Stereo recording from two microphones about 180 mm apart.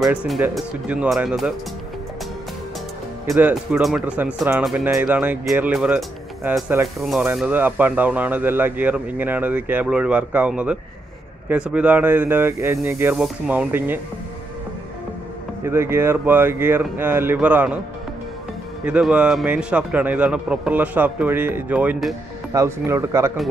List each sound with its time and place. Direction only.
0.0 s speech: 5° right (ahead or behind)
3.3 s a man's voice: 10° right (ahead or behind)
15.6 s a man's voice: 15° right (ahead or behind)
18.9 s a man's voice: 5° right (ahead or behind)